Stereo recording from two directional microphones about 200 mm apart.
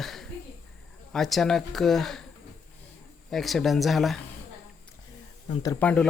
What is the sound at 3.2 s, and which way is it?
Speech, centre (ahead or behind).